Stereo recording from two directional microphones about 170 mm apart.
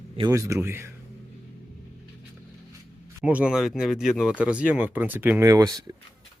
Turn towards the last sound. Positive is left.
turn(degrees=-20)  # may be behind; listen again after turning